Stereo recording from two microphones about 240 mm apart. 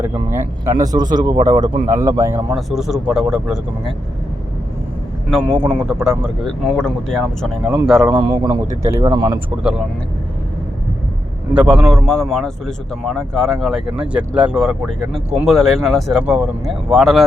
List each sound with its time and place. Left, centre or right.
0.0 s a man's voice: centre
5.9 s a man's voice: centre
8.1 s speech: centre
11.5 s a man's voice: centre